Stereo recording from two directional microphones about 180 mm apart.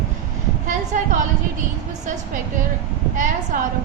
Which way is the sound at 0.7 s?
45° right (ahead or behind).